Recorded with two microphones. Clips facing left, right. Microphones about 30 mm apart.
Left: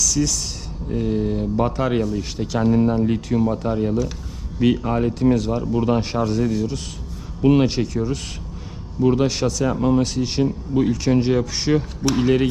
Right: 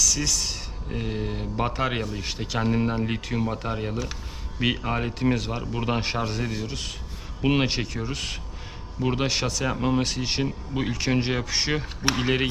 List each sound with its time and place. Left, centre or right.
0.0 s speech: centre